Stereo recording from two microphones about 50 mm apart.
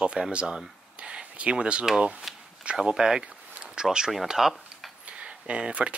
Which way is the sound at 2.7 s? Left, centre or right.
Centre.